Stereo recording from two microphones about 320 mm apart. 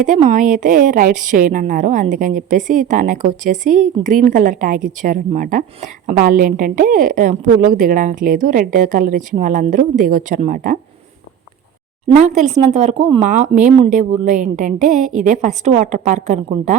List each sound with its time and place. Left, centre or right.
0.0 s a woman's voice: right
12.1 s a woman's voice: right